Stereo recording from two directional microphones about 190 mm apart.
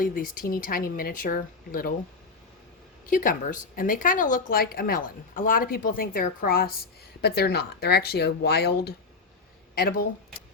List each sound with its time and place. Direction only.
0.0 s speech: 45° left (ahead or behind)
3.1 s speech: 45° left (ahead or behind)